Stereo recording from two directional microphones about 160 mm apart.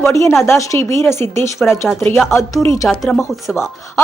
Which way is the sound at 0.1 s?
20° left (ahead or behind).